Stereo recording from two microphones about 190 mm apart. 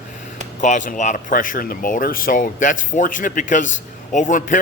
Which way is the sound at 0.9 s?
40° left (ahead or behind).